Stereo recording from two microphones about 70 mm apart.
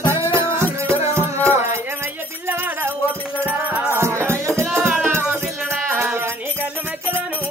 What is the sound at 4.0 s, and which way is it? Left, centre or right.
Music, right.